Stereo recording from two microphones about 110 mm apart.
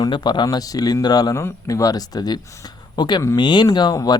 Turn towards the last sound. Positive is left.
turn(degrees=35)  # may be behind; listen again after turning